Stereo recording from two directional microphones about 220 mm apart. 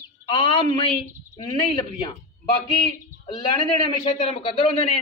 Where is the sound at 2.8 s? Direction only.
20° left (ahead or behind).